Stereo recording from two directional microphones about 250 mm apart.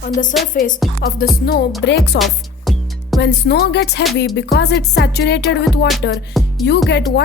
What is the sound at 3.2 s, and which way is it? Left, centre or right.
Speech, left.